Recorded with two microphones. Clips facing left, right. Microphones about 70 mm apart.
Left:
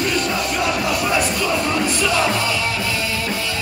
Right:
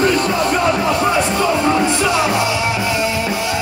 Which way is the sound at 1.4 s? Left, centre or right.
Right.